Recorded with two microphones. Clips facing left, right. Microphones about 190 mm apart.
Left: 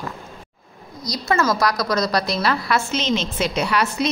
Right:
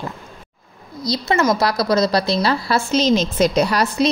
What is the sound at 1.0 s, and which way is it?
A woman's voice, 25° right (ahead or behind).